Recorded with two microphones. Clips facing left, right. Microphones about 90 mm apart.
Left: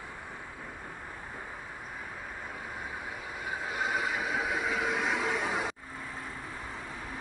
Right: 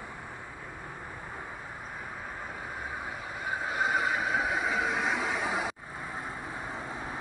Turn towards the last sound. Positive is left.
turn(degrees=-5)  # may be behind; listen again after turning